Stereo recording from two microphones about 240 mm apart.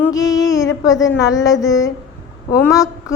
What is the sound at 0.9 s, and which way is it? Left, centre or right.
A woman's voice, centre.